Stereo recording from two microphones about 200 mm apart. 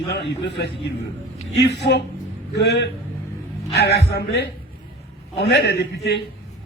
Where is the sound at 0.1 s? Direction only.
55° left (ahead or behind).